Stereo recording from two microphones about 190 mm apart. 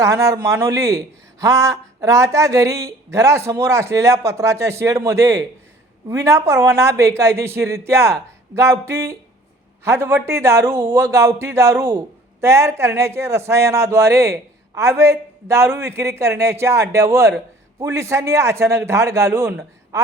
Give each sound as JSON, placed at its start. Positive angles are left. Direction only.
{"t": 0.0, "sound": "a woman's voice", "side_deg": -15}